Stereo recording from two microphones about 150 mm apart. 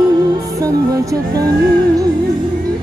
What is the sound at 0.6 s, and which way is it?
Music, 25° right (ahead or behind).